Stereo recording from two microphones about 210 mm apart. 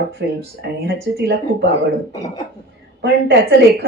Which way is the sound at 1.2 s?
55° right (ahead or behind).